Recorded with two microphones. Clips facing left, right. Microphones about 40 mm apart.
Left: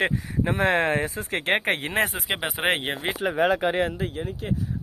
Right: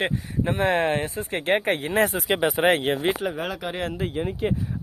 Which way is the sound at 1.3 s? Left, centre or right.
Left.